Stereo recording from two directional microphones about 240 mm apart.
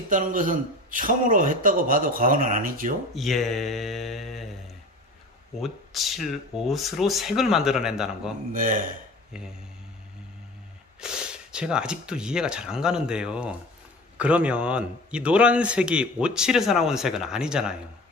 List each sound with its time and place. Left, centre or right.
0.1 s a man's voice: right
3.2 s speech: centre
5.6 s speech: centre
8.5 s a man's voice: right
11.0 s speech: centre